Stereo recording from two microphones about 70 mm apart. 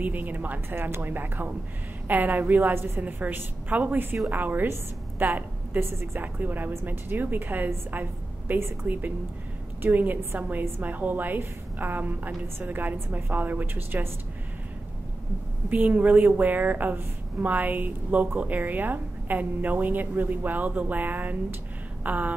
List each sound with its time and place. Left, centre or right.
0.0 s a woman's voice: right
15.7 s a woman's voice: right
22.0 s a sound: right